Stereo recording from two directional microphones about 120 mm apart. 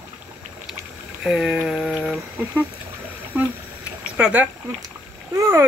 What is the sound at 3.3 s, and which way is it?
Speech, 10° right (ahead or behind).